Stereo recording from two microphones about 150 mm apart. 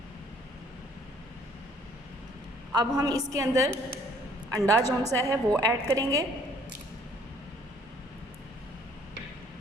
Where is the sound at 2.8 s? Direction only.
25° right (ahead or behind).